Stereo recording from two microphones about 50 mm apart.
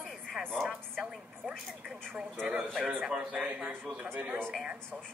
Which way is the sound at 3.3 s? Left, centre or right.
Right.